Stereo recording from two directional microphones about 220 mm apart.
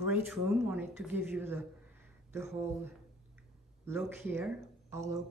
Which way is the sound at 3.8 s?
10° right (ahead or behind).